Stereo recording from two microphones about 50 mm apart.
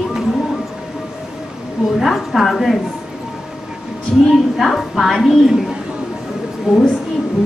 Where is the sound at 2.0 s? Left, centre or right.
Centre.